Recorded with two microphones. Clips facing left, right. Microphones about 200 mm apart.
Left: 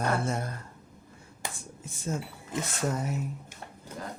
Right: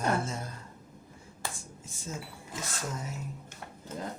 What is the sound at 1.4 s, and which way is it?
Finger snapping, 20° left (ahead or behind).